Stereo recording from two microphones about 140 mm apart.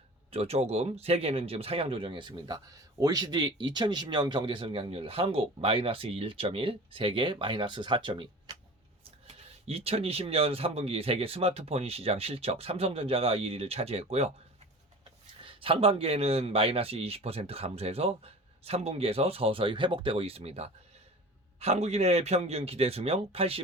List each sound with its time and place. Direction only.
0.3 s speech: 45° right (ahead or behind)
15.4 s speech: 40° right (ahead or behind)